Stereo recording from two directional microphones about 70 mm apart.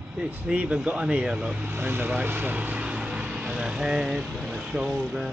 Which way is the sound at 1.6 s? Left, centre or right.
Right.